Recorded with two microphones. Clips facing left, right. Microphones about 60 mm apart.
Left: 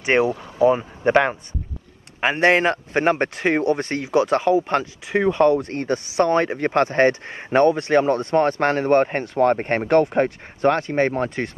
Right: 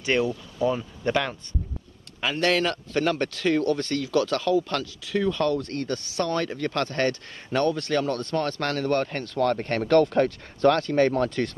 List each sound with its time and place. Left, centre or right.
0.0 s speech: left